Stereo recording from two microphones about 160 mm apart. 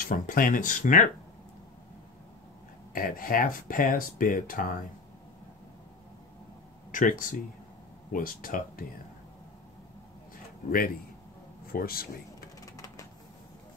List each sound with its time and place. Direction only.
0.0 s speech: 60° left (ahead or behind)
2.9 s speech: 60° left (ahead or behind)
6.9 s speech: 55° left (ahead or behind)
11.6 s speech: 65° left (ahead or behind)
12.5 s a sound: 20° left (ahead or behind)